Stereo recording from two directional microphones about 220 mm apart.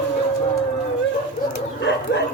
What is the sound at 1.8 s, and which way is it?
Bird, 55° left (ahead or behind).